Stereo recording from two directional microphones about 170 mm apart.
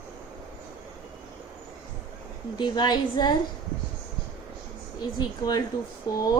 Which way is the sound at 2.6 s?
25° left (ahead or behind).